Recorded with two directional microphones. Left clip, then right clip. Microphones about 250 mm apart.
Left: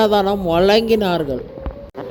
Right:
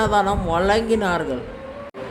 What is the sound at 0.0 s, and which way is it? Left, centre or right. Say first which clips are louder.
Speech: left 3 dB; left.